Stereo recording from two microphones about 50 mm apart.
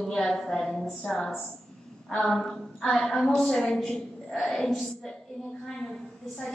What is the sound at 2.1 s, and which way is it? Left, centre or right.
A woman's voice, centre.